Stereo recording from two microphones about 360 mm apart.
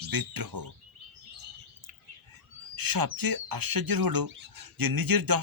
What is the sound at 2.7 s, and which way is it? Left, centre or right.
Speech, right.